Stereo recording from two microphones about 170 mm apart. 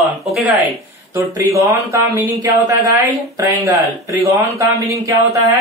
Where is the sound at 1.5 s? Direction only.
20° right (ahead or behind).